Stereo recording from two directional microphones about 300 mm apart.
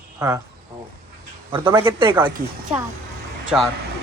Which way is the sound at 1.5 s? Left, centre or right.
Centre.